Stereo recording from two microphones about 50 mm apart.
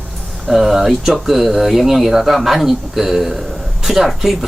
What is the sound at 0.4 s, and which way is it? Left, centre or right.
Speech, centre.